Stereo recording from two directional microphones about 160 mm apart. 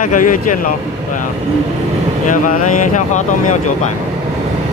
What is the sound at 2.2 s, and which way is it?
Speech, 50° left (ahead or behind).